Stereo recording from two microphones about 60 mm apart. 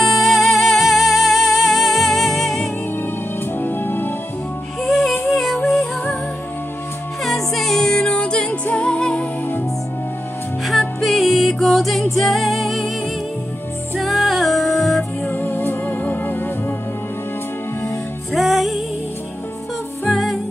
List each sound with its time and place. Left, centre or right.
0.0 s music: centre
3.5 s music: left
4.8 s music: centre
7.2 s music: centre
10.7 s music: centre
13.9 s music: centre
15.2 s music: left
18.3 s music: centre
20.1 s music: centre